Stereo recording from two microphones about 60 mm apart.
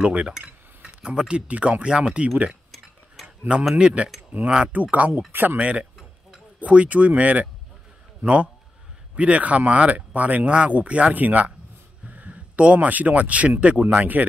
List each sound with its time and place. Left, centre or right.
0.4 s speech: centre
3.7 s speech: centre
4.3 s speech: right
5.3 s speech: right
5.6 s a man's voice: right